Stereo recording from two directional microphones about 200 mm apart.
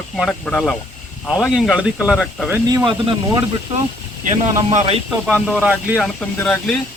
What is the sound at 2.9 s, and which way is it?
Speech, 25° right (ahead or behind).